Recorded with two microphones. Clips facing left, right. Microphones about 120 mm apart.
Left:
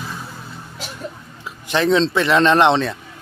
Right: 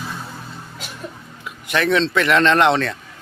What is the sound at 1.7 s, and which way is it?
A man's voice, 25° left (ahead or behind).